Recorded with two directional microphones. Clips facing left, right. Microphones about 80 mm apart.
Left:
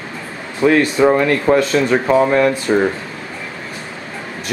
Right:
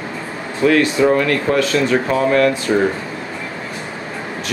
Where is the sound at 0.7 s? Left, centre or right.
Left.